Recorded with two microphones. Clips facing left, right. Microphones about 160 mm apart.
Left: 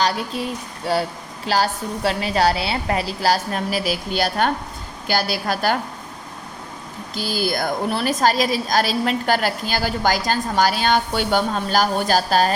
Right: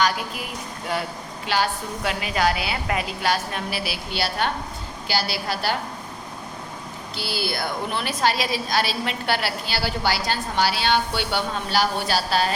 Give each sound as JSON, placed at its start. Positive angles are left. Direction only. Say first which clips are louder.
{"t": 0.9, "sound": "a woman's voice", "louder": "left 6 dB", "side_deg": 35}
{"t": 7.2, "sound": "a woman's voice", "louder": "left 5 dB", "side_deg": 45}